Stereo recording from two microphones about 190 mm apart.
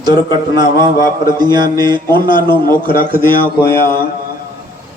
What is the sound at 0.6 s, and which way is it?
Mantra, 20° right (ahead or behind).